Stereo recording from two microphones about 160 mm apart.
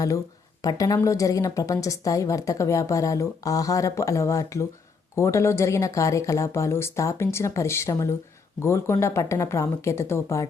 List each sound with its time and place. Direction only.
0.6 s a woman's voice: 20° left (ahead or behind)